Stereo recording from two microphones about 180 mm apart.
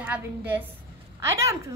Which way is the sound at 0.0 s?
10° right (ahead or behind).